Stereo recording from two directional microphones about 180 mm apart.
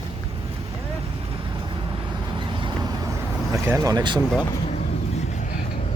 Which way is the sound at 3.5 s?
15° right (ahead or behind).